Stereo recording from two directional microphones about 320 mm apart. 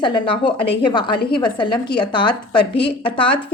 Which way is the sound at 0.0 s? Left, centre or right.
Centre.